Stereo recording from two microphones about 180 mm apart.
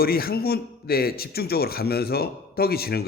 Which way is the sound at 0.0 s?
55° left (ahead or behind).